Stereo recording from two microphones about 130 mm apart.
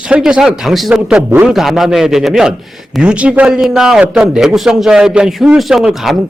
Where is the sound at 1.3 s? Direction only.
15° right (ahead or behind).